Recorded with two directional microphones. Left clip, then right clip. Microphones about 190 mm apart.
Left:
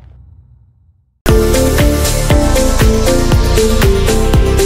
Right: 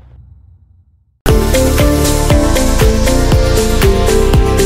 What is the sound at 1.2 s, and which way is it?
Music, centre (ahead or behind).